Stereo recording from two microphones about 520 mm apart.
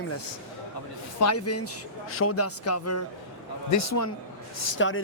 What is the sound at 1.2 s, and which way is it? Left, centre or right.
Speech, left.